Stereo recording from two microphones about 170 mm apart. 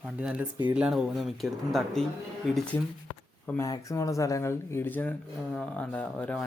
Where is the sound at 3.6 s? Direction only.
20° left (ahead or behind).